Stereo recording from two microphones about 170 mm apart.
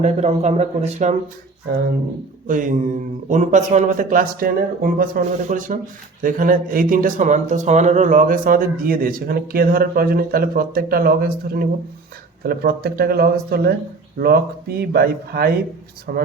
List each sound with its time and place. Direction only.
0.0 s speech: 40° right (ahead or behind)
2.5 s speech: 50° right (ahead or behind)